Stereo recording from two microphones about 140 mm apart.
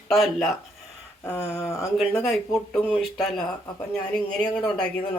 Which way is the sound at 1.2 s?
15° left (ahead or behind).